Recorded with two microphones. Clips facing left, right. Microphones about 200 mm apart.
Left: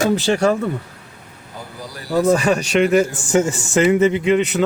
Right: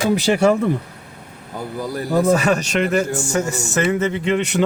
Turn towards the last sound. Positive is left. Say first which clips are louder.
# left 3 dB
turn(degrees=5)  # may be behind; listen again after turning